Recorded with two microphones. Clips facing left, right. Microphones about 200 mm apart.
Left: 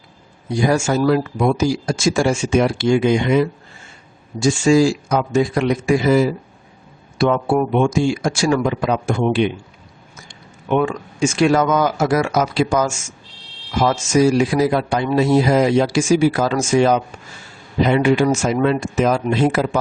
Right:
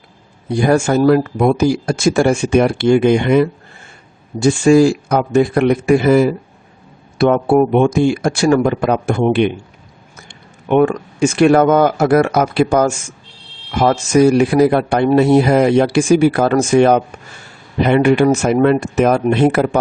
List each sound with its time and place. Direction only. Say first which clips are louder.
0.4 s speech: right 4 dB; 60° right (ahead or behind)